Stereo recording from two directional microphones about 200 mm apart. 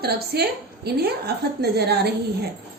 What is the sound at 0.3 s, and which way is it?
A woman's voice, 50° right (ahead or behind).